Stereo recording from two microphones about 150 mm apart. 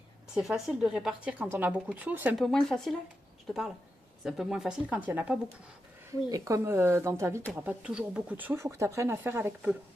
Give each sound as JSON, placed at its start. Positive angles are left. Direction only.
{"t": 0.3, "sound": "speech", "side_deg": 0}
{"t": 2.4, "sound": "speech", "side_deg": 5}
{"t": 4.2, "sound": "speech", "side_deg": 0}
{"t": 6.1, "sound": "speech", "side_deg": -20}